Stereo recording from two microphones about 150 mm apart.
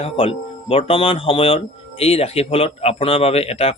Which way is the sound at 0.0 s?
40° left (ahead or behind).